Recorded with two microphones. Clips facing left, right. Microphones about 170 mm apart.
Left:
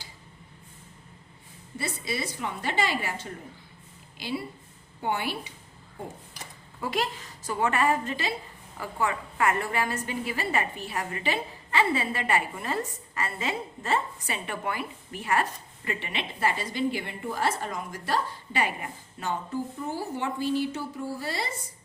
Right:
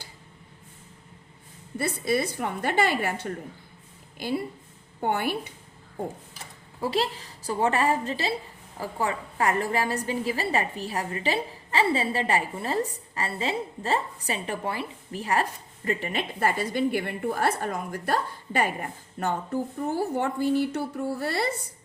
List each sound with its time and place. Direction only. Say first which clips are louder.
1.8 s a woman's voice: right 7 dB; 55° right (ahead or behind)
6.7 s a woman's voice: right 3 dB; 30° right (ahead or behind); by 21.5 s 60° right (ahead or behind)